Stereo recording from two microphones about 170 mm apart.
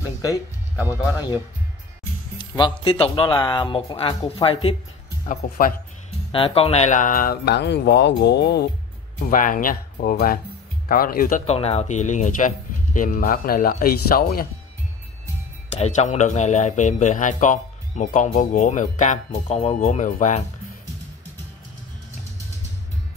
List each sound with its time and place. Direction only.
0.8 s speech: 20° left (ahead or behind)
2.3 s music: 25° left (ahead or behind)
2.8 s speech: 30° left (ahead or behind)
5.3 s speech: 55° left (ahead or behind)
6.3 s speech: 35° left (ahead or behind); by 8.6 s 75° left (ahead or behind)
9.2 s speech: 55° left (ahead or behind)
15.7 s speech: 45° left (ahead or behind)